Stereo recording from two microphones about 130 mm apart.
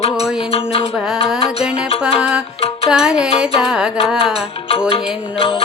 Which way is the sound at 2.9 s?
5° right (ahead or behind).